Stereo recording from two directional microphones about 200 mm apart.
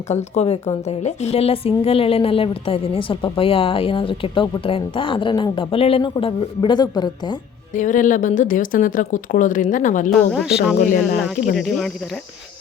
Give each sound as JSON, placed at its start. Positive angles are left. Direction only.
{"t": 0.1, "sound": "a woman's voice", "side_deg": 35}
{"t": 7.7, "sound": "a woman's voice", "side_deg": 40}
{"t": 10.2, "sound": "speech", "side_deg": 0}
{"t": 10.8, "sound": "speech", "side_deg": 45}
{"t": 11.5, "sound": "speech", "side_deg": 0}